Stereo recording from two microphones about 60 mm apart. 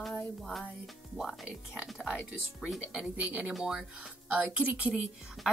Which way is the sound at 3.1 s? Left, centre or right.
Right.